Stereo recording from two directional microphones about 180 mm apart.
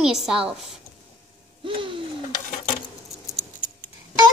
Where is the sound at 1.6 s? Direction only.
30° right (ahead or behind).